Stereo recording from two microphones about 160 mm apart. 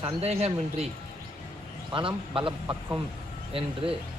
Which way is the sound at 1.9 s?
30° right (ahead or behind).